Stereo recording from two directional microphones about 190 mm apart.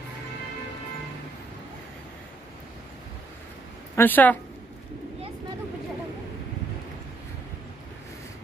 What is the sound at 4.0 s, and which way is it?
Speech, 10° left (ahead or behind).